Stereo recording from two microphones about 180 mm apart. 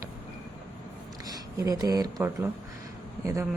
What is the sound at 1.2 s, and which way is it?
A woman's voice, 20° right (ahead or behind).